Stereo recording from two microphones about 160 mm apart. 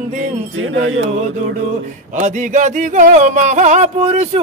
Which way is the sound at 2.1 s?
50° right (ahead or behind).